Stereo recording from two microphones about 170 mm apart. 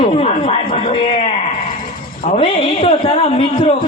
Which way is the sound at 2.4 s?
35° left (ahead or behind).